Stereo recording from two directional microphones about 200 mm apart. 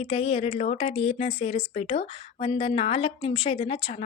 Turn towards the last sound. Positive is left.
turn(degrees=25)  # may be behind; listen again after turning